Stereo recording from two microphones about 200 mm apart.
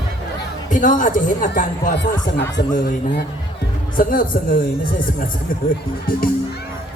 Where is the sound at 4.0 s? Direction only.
45° left (ahead or behind).